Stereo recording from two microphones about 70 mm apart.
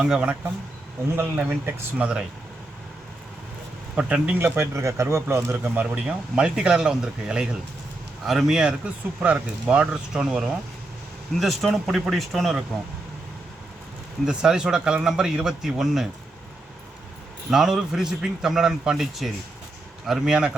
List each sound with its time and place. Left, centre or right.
0.0 s a man's voice: centre
1.4 s speech: right
2.0 s a man's voice: centre
3.9 s a man's voice: centre
4.4 s speech: right
4.7 s speech: right
5.8 s a man's voice: centre
14.3 s a man's voice: centre
17.5 s a man's voice: centre